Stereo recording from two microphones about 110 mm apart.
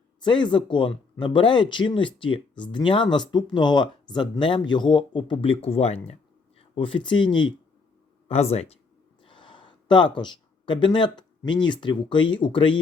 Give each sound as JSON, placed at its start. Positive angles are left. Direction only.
{"t": 0.2, "sound": "speech", "side_deg": 45}
{"t": 6.6, "sound": "speech", "side_deg": 50}
{"t": 8.3, "sound": "speech", "side_deg": 70}
{"t": 9.2, "sound": "speech", "side_deg": 45}